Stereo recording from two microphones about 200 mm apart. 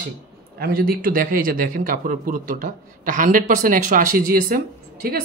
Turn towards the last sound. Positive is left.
turn(degrees=-50)  # may be behind; listen again after turning